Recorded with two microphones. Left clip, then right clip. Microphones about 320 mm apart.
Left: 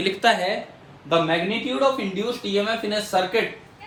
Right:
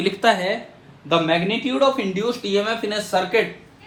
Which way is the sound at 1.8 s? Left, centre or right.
Right.